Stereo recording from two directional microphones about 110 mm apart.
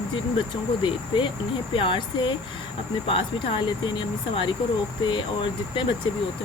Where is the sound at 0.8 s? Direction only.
45° left (ahead or behind).